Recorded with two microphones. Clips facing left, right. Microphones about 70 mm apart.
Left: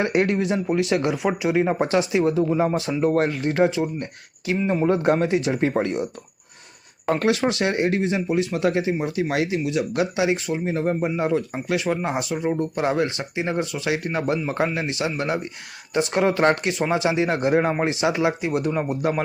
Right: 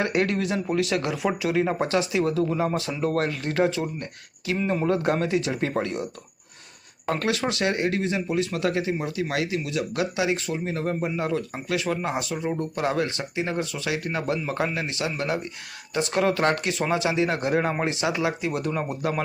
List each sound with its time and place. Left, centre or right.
0.0 s speech: left
4.5 s speech: centre
7.1 s speech: left